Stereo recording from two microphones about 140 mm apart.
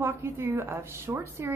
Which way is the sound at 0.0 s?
15° right (ahead or behind).